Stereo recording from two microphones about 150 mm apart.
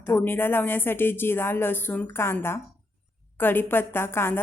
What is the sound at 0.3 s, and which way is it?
A woman's voice, 15° left (ahead or behind).